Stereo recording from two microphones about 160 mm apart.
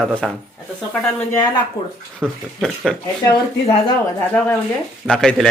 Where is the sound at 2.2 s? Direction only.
Centre (ahead or behind).